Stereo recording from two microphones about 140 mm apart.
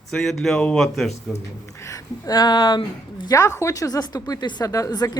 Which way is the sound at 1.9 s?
25° left (ahead or behind).